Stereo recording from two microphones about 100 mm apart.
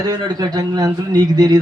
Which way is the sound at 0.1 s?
40° right (ahead or behind).